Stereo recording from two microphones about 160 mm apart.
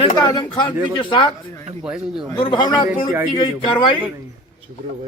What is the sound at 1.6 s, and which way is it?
Speech, 5° right (ahead or behind).